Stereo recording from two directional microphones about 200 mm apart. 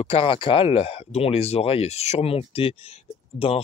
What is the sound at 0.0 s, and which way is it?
Speech, 30° left (ahead or behind).